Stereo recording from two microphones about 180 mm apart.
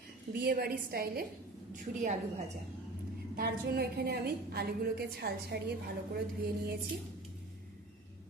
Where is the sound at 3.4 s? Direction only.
65° right (ahead or behind).